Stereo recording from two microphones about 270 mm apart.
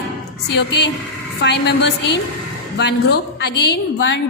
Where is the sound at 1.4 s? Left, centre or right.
Left.